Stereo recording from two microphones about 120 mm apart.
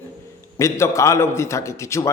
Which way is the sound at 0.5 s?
25° left (ahead or behind).